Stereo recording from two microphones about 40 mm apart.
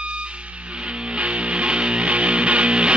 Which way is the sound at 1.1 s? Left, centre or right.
Right.